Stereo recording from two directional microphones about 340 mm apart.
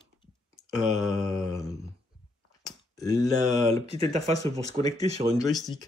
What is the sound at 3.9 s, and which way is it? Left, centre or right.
Speech, centre.